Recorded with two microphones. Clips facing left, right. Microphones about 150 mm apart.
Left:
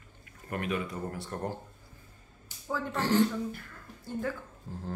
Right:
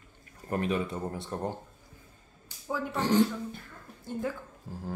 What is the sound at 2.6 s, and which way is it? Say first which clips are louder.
Speech: right 1 dB; 15° right (ahead or behind).